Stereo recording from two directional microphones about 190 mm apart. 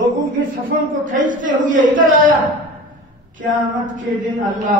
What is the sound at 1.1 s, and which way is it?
A man's voice, 45° right (ahead or behind).